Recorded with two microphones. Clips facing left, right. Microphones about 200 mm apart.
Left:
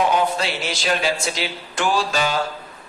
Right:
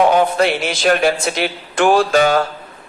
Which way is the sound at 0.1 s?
55° right (ahead or behind).